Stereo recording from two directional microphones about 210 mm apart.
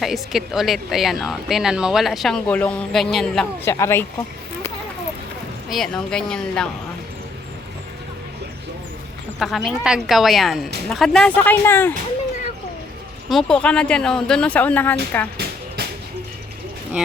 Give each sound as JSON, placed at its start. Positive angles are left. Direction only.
{"t": 0.0, "sound": "a woman's voice", "side_deg": 0}
{"t": 5.6, "sound": "a woman's voice", "side_deg": 0}
{"t": 9.4, "sound": "a woman's voice", "side_deg": 0}
{"t": 13.3, "sound": "a woman's voice", "side_deg": 5}
{"t": 15.4, "sound": "a sound", "side_deg": -50}